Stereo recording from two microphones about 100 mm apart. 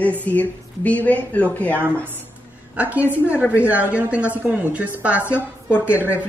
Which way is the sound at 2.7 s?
15° right (ahead or behind).